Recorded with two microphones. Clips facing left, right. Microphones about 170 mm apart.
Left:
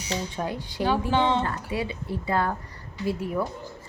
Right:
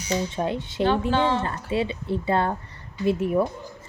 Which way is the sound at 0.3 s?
25° right (ahead or behind).